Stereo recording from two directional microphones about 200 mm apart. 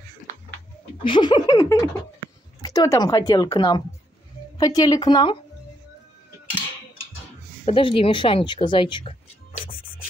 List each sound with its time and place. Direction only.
1.0 s a woman's voice: 25° left (ahead or behind)
7.6 s speech: 25° left (ahead or behind)